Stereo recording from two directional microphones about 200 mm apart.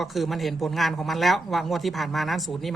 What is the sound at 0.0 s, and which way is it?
Speech, centre (ahead or behind).